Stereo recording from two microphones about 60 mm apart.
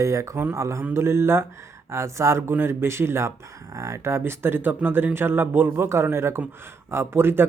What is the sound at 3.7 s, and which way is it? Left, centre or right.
Speech, right.